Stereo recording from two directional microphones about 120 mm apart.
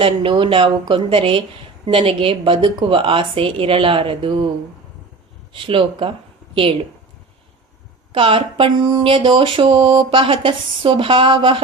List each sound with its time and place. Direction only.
0.0 s speech: 45° right (ahead or behind)
5.5 s speech: 45° right (ahead or behind)
8.1 s speech: 45° right (ahead or behind)